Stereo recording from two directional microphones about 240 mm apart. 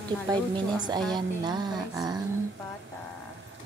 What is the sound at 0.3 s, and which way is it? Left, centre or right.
Speech, centre.